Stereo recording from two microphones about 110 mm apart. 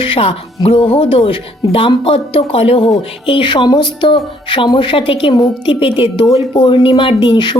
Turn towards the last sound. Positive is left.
turn(degrees=45)  # may be behind; listen again after turning